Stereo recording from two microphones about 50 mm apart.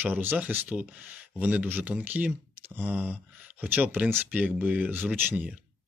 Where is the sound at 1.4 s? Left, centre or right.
Right.